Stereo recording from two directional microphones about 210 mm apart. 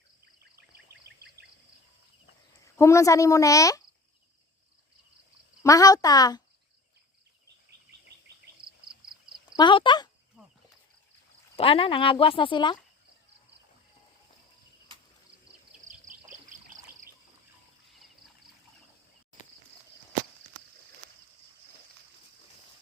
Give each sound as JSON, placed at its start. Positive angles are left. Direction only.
{"t": 0.9, "sound": "a sound", "side_deg": -50}
{"t": 2.7, "sound": "speech", "side_deg": 15}
{"t": 5.6, "sound": "speech", "side_deg": 15}
{"t": 9.6, "sound": "speech", "side_deg": 20}
{"t": 11.5, "sound": "speech", "side_deg": 25}
{"t": 16.0, "sound": "trickle", "side_deg": -40}
{"t": 17.8, "sound": "frog", "side_deg": 0}